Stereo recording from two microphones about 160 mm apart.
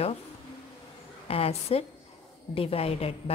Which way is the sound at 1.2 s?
40° left (ahead or behind).